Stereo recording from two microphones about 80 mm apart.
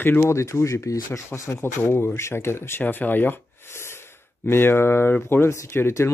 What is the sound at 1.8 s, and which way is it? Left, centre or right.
Speech, left.